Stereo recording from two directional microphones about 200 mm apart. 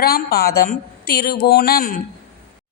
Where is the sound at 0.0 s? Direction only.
50° left (ahead or behind).